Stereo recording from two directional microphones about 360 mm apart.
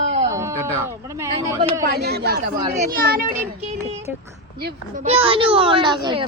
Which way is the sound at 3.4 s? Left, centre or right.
Centre.